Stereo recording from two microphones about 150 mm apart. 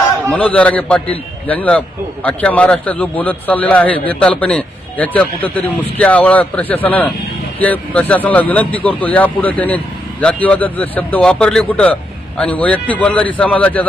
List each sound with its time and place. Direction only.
0.3 s a man's voice: 10° left (ahead or behind)